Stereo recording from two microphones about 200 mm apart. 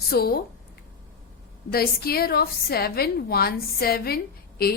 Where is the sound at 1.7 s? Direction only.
50° left (ahead or behind).